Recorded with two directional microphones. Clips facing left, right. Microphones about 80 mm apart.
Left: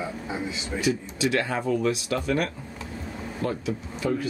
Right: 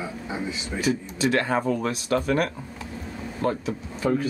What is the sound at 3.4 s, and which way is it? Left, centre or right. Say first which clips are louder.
Speech: right 3 dB; right.